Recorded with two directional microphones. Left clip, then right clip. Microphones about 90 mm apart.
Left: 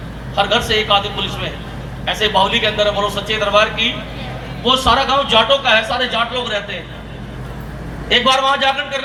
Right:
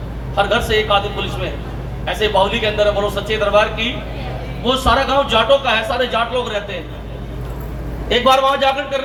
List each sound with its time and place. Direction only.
0.4 s a man's voice: 40° right (ahead or behind)
2.8 s a man's voice: 25° right (ahead or behind)
3.2 s a man's voice: 40° right (ahead or behind)
8.1 s a man's voice: 45° right (ahead or behind)